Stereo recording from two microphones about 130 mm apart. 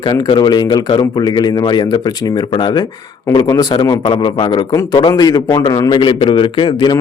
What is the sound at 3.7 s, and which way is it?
A man's voice, 40° left (ahead or behind).